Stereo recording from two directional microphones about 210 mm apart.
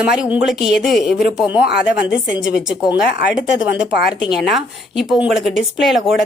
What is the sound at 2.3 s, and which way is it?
Speech, 60° left (ahead or behind).